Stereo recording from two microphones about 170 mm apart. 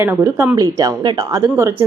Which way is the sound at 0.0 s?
15° right (ahead or behind).